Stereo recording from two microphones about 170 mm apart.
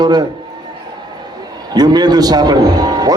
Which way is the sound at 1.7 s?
25° right (ahead or behind).